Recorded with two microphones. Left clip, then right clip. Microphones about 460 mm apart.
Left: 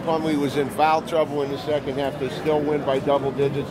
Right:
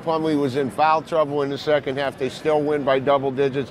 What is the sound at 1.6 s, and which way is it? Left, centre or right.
A man's voice, right.